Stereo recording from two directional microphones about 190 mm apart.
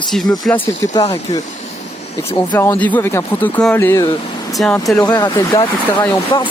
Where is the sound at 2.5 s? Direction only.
10° left (ahead or behind).